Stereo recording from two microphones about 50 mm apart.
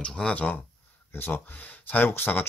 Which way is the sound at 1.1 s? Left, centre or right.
Left.